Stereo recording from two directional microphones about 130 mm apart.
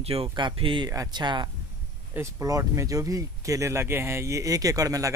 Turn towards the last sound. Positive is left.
turn(degrees=-25)  # may be behind; listen again after turning